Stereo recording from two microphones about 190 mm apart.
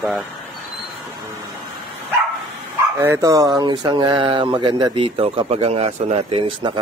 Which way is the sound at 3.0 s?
15° right (ahead or behind).